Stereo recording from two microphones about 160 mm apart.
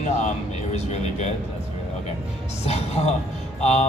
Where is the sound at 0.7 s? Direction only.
45° left (ahead or behind).